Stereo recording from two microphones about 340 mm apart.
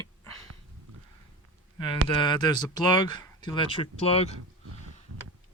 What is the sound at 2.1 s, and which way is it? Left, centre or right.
Speech, centre.